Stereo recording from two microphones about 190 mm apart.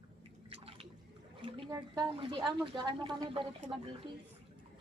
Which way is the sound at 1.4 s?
25° right (ahead or behind).